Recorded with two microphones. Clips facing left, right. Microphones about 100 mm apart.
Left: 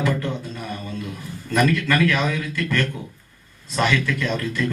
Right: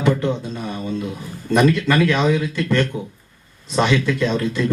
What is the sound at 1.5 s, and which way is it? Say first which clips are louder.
A man's voice: right 3 dB; 20° right (ahead or behind).